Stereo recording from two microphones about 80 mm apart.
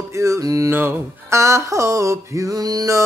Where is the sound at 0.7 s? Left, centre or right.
Right.